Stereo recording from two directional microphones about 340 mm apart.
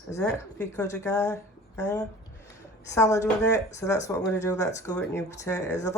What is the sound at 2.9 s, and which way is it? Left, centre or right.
Speech, centre.